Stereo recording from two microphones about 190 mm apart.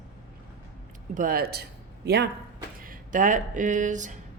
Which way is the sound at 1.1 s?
50° right (ahead or behind).